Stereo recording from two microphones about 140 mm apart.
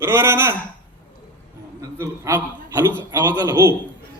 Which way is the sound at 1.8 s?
20° right (ahead or behind).